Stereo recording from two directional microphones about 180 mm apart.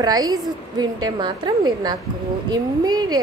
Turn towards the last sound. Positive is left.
turn(degrees=-20)  # may be behind; listen again after turning